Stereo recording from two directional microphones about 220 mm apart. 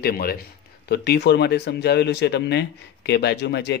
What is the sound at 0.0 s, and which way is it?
Speech, 45° left (ahead or behind).